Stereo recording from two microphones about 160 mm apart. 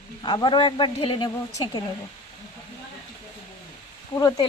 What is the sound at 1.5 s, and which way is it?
Speech, 20° left (ahead or behind).